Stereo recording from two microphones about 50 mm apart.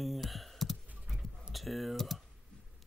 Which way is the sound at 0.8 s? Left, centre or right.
Right.